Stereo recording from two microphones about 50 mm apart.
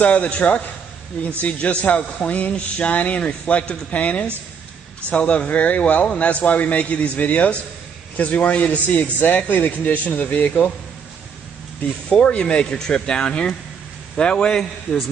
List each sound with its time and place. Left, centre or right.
0.0 s a man's voice: left
12.1 s a man's voice: left
12.7 s speech: centre